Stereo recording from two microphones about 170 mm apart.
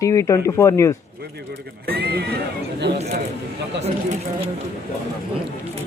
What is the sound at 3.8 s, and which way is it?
Speech, 40° right (ahead or behind).